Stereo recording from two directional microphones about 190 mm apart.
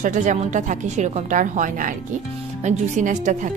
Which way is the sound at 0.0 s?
40° right (ahead or behind).